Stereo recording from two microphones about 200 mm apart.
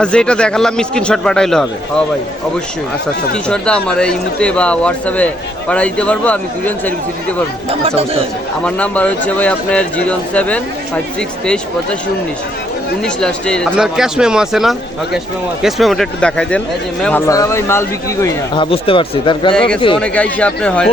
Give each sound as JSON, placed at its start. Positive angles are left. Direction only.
{"t": 0.0, "sound": "speech", "side_deg": 5}
{"t": 3.3, "sound": "speech", "side_deg": 5}
{"t": 7.7, "sound": "speech", "side_deg": -30}
{"t": 8.6, "sound": "speech", "side_deg": 5}
{"t": 13.0, "sound": "speech", "side_deg": 5}
{"t": 19.5, "sound": "speech", "side_deg": 5}